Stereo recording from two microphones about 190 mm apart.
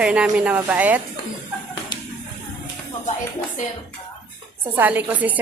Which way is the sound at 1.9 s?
25° left (ahead or behind).